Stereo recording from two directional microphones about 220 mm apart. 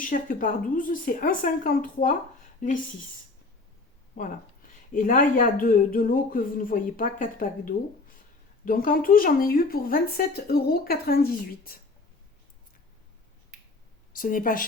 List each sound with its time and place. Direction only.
0.0 s speech: 40° left (ahead or behind)
4.1 s speech: 35° left (ahead or behind)
14.2 s speech: 40° left (ahead or behind)